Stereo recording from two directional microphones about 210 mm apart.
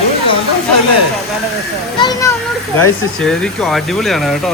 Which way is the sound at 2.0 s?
20° left (ahead or behind).